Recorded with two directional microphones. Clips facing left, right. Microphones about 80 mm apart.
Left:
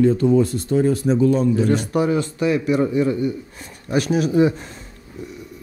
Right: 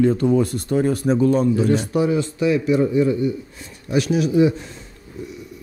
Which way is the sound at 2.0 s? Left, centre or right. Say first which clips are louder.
Even; left.